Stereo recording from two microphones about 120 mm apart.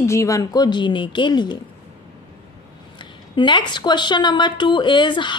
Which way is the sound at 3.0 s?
40° left (ahead or behind).